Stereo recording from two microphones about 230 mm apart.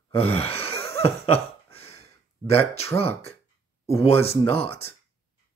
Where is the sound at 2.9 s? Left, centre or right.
Left.